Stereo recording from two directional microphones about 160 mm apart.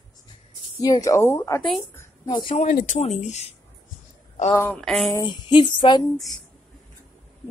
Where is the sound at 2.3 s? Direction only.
25° left (ahead or behind).